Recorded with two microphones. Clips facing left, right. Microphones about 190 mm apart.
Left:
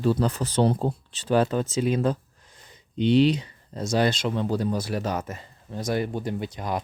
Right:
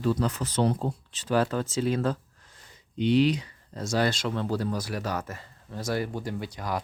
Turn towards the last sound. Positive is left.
turn(degrees=20)  # may be behind; listen again after turning